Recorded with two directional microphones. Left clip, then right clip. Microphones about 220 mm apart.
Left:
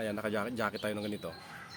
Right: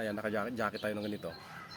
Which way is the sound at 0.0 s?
15° left (ahead or behind).